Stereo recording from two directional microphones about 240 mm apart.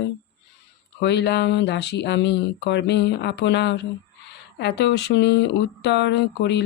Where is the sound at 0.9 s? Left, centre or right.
Left.